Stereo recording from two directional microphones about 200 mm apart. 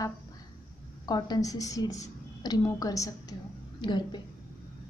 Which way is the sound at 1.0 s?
20° left (ahead or behind).